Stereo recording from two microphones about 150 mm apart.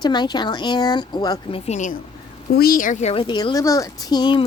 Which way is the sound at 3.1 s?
30° left (ahead or behind).